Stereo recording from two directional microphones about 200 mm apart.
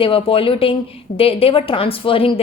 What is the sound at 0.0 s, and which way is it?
A woman's voice, 25° left (ahead or behind).